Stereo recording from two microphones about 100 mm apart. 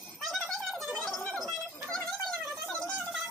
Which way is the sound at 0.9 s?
5° left (ahead or behind).